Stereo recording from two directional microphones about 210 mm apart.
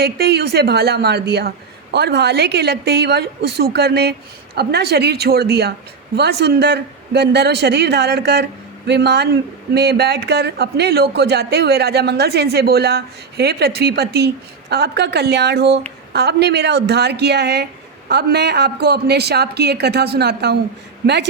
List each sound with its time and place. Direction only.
0.0 s a man's voice: 50° right (ahead or behind)